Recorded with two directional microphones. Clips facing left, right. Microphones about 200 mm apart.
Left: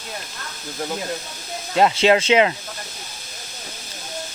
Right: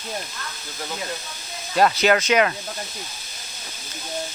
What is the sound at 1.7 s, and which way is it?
Speech, 25° left (ahead or behind).